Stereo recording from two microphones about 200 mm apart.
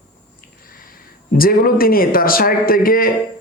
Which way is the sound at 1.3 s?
45° left (ahead or behind).